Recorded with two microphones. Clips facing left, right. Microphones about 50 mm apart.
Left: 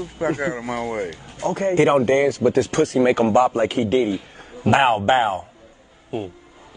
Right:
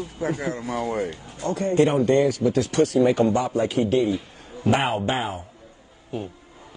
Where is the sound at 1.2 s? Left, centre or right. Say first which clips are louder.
Left 4 dB; left.